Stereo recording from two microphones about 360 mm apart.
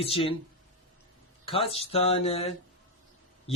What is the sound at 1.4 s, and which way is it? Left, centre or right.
Speech, centre.